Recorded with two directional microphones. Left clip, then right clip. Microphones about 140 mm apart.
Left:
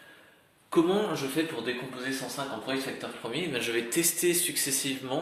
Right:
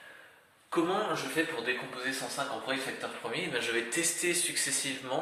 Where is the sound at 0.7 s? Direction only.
50° left (ahead or behind).